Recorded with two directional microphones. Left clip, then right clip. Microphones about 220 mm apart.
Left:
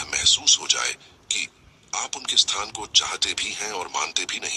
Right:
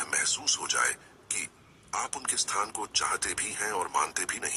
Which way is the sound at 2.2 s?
25° left (ahead or behind).